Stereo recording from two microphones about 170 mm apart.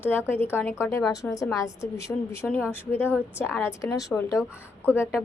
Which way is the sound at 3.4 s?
15° left (ahead or behind).